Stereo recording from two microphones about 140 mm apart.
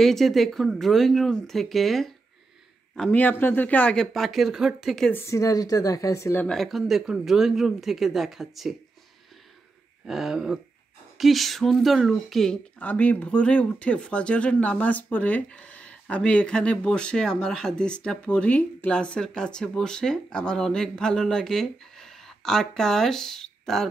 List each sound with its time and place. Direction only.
0.0 s speech: centre (ahead or behind)
3.0 s speech: 10° left (ahead or behind)
5.1 s speech: 20° left (ahead or behind)
6.4 s speech: centre (ahead or behind)
10.0 s speech: 5° right (ahead or behind)